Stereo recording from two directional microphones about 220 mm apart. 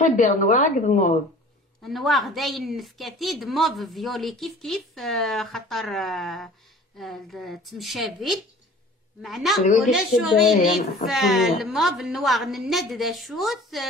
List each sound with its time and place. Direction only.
0.0 s a woman's voice: 35° left (ahead or behind)
1.8 s a woman's voice: centre (ahead or behind)